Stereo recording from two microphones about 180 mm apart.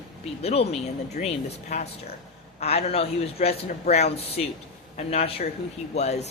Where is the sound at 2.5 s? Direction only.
35° left (ahead or behind).